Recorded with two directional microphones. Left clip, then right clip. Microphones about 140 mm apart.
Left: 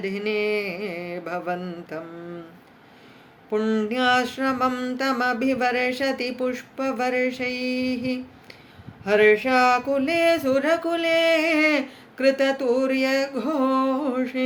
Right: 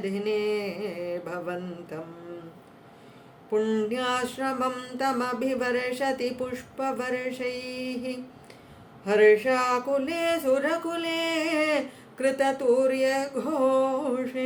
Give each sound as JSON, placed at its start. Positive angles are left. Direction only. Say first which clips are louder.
{"t": 0.0, "sound": "music", "louder": "left 3 dB", "side_deg": 20}
{"t": 3.5, "sound": "music", "louder": "left 2 dB", "side_deg": 15}